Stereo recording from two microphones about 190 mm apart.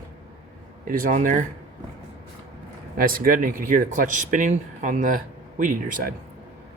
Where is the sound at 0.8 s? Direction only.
45° right (ahead or behind).